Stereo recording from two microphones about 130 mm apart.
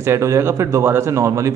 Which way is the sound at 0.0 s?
20° right (ahead or behind).